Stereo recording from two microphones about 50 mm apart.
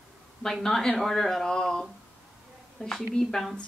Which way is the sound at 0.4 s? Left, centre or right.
Centre.